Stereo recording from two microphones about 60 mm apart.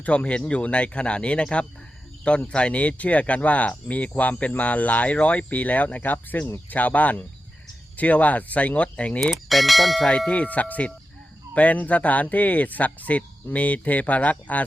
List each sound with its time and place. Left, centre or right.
0.2 s speech: centre
9.2 s speech: centre
10.1 s speech: centre